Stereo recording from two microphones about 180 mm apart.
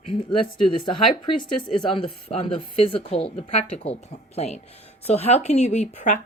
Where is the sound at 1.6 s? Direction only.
25° left (ahead or behind).